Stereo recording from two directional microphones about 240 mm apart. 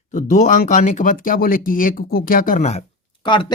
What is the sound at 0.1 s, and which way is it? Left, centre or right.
Speech, left.